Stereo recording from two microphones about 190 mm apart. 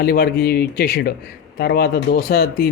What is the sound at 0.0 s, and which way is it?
Speech, 50° left (ahead or behind).